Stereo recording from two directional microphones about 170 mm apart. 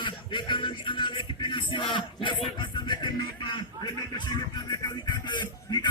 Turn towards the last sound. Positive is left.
turn(degrees=25)  # may be behind; listen again after turning